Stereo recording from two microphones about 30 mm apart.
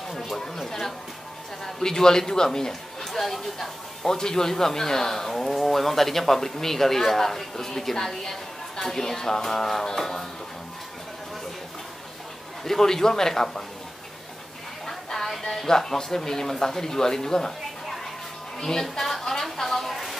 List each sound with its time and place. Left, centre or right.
0.4 s a man's voice: centre
3.1 s speech: centre
4.0 s speech: centre
12.6 s speech: centre
14.9 s music: centre
15.3 s speech: centre
18.6 s speech: centre